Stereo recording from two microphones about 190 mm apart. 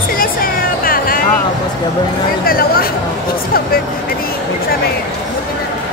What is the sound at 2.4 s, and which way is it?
Speech, 50° left (ahead or behind).